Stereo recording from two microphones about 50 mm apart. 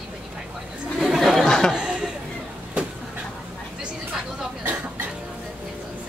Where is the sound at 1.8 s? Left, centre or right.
Right.